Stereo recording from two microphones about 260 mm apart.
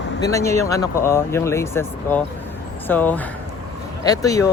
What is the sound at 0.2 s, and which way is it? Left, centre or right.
Speech, centre.